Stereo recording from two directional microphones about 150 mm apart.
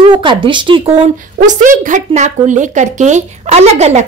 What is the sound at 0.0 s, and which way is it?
A woman's voice, 35° right (ahead or behind).